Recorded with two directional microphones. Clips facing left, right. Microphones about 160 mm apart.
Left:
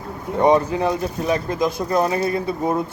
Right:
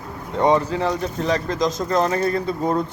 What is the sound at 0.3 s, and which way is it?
Speech, 15° left (ahead or behind).